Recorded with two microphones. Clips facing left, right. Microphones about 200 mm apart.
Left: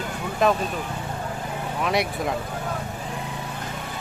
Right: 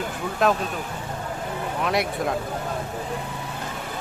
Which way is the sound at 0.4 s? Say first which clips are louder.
Left 1 dB; centre (ahead or behind).